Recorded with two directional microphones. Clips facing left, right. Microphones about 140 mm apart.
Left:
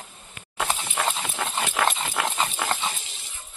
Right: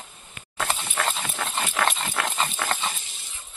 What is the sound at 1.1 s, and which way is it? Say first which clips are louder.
Dog: left 1 dB; 5° left (ahead or behind).